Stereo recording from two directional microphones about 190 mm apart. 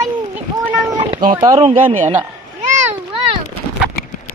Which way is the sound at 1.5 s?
35° right (ahead or behind).